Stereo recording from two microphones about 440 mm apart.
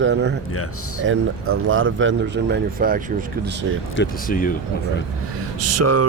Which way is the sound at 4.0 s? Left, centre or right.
Centre.